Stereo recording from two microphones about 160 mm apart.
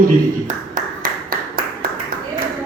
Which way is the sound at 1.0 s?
65° right (ahead or behind).